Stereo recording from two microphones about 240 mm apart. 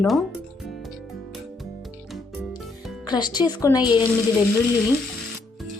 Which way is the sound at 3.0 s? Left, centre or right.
Centre.